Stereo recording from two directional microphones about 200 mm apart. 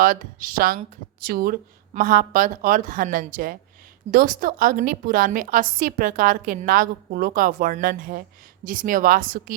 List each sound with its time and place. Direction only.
0.0 s a woman's voice: 45° right (ahead or behind)